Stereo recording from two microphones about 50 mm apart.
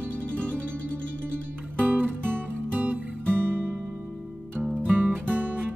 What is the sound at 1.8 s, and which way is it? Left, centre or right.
Music, right.